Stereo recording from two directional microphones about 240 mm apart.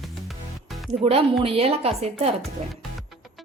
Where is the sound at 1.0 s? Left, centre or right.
Right.